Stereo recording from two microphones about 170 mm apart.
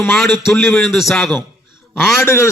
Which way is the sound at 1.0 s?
Centre (ahead or behind).